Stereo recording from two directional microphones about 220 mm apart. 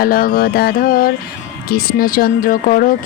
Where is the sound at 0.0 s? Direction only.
45° left (ahead or behind).